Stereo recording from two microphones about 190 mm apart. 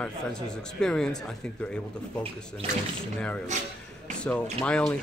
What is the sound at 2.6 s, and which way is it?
Speech, 30° right (ahead or behind).